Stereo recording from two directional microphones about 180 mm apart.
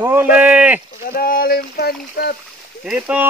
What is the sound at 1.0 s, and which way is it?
Speech, 55° left (ahead or behind).